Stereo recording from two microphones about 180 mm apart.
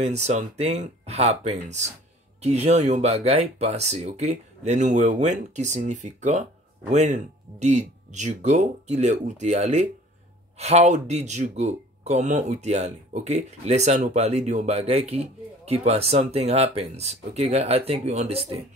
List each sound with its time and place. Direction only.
0.0 s speech: 40° right (ahead or behind)